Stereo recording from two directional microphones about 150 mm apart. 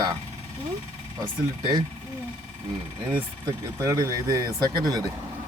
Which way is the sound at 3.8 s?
20° right (ahead or behind).